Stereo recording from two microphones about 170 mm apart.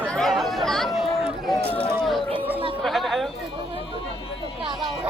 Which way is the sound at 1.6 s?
35° left (ahead or behind).